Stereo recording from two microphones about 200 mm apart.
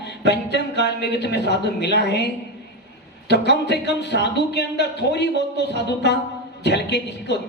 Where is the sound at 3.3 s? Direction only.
55° left (ahead or behind).